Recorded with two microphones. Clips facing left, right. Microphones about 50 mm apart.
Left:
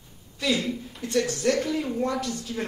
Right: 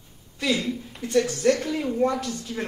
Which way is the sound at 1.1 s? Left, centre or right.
Centre.